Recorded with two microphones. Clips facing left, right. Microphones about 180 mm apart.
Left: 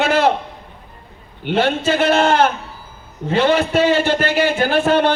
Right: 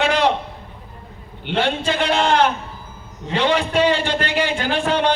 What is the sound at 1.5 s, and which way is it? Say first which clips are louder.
Speech: left 4 dB; 45° left (ahead or behind).